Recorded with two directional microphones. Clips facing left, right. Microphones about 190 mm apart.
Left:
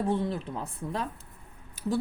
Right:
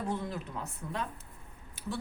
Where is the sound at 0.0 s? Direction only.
30° left (ahead or behind).